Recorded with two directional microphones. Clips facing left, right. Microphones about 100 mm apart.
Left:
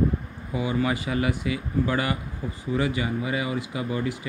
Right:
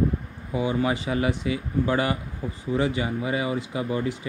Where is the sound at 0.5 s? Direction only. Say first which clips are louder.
Right 1 dB; 30° right (ahead or behind).